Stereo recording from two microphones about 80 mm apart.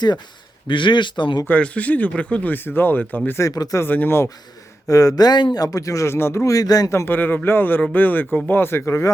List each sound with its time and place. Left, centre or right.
0.7 s speech: left
1.5 s speech: centre
3.4 s speech: left
3.8 s speech: left
4.9 s speech: left
5.5 s speech: left
6.9 s speech: left